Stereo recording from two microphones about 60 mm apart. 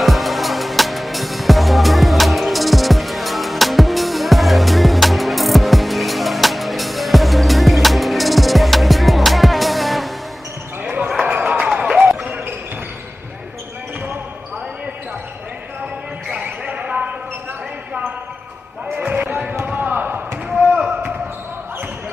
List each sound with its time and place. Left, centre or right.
0.0 s music: centre
10.8 s basketball bounce: right
11.6 s a sound: centre
16.6 s basketball bounce: centre
18.9 s basketball bounce: right